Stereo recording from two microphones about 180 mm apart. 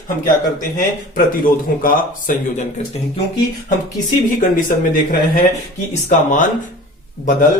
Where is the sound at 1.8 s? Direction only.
50° left (ahead or behind).